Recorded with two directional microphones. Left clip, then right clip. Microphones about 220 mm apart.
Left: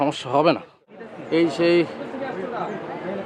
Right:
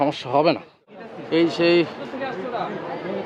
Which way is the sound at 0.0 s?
10° left (ahead or behind).